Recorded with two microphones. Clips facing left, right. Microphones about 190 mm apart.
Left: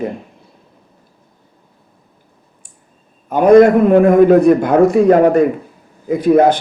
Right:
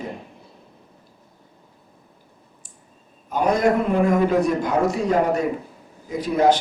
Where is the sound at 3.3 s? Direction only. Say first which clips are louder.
Left 12 dB; 55° left (ahead or behind).